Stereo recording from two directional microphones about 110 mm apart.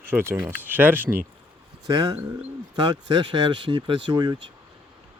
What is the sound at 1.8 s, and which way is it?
Speech, 35° right (ahead or behind).